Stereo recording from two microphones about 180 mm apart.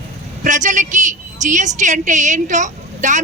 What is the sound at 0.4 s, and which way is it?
A woman's voice, 45° right (ahead or behind).